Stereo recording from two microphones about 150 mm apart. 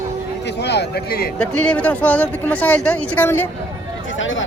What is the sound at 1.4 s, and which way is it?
Speech, 10° left (ahead or behind).